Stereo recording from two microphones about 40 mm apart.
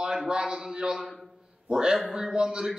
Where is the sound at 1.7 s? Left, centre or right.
Centre.